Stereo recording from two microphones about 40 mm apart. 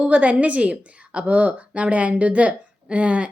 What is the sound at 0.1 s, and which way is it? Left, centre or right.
A woman's voice, right.